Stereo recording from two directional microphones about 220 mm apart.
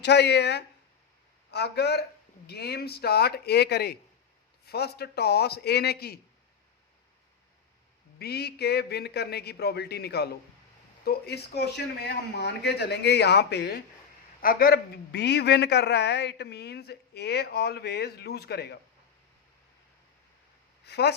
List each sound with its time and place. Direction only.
0.0 s a woman's voice: 50° left (ahead or behind)
8.2 s a woman's voice: 45° left (ahead or behind)
20.8 s speech: 50° left (ahead or behind)